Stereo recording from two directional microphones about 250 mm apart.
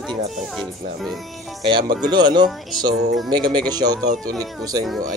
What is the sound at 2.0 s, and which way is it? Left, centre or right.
Speech, centre.